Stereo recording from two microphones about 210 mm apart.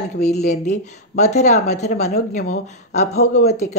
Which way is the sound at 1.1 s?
35° left (ahead or behind).